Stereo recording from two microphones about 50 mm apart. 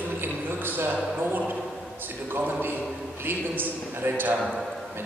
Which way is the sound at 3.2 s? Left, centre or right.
Right.